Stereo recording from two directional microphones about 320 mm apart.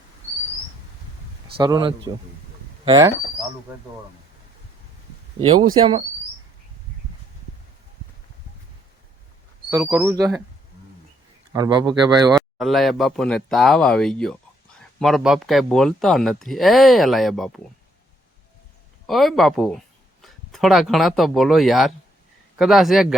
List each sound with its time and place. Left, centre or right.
1.5 s speech: centre
5.4 s speech: centre
9.6 s speech: centre
11.5 s speech: centre
12.4 s speech: centre
19.0 s speech: centre